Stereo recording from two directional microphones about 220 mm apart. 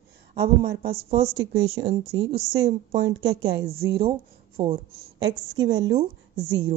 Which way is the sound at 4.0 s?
25° right (ahead or behind).